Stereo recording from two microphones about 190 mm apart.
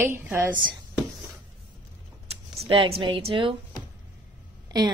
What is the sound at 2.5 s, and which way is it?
A woman's voice, 30° right (ahead or behind).